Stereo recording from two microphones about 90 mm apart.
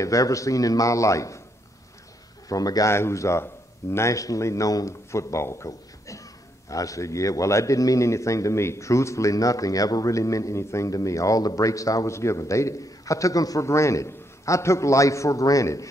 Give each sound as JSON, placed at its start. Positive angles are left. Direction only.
{"t": 0.0, "sound": "a man's voice", "side_deg": 40}
{"t": 2.4, "sound": "a man's voice", "side_deg": 40}
{"t": 2.9, "sound": "a man's voice", "side_deg": 30}